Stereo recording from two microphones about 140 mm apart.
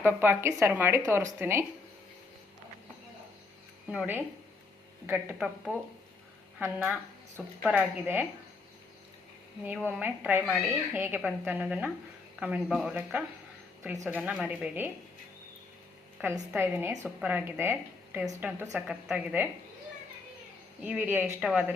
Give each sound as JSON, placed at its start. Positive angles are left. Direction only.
{"t": 0.0, "sound": "a woman's voice", "side_deg": -15}
{"t": 3.9, "sound": "a woman's voice", "side_deg": -15}
{"t": 5.4, "sound": "speech", "side_deg": 0}
{"t": 6.6, "sound": "a woman's voice", "side_deg": -10}
{"t": 9.6, "sound": "a woman's voice", "side_deg": -10}
{"t": 13.9, "sound": "a woman's voice", "side_deg": -20}
{"t": 14.2, "sound": "speech", "side_deg": 0}
{"t": 14.4, "sound": "a woman's voice", "side_deg": -15}
{"t": 16.5, "sound": "a woman's voice", "side_deg": -15}
{"t": 16.9, "sound": "a woman's voice", "side_deg": 0}
{"t": 20.8, "sound": "a woman's voice", "side_deg": -10}